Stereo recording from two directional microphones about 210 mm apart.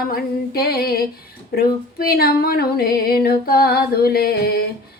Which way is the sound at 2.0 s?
45° left (ahead or behind).